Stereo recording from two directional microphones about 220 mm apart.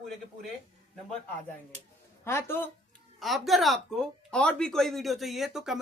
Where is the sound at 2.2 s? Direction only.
10° left (ahead or behind).